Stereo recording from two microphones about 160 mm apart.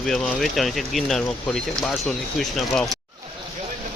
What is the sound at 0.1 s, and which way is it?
Speech, centre (ahead or behind).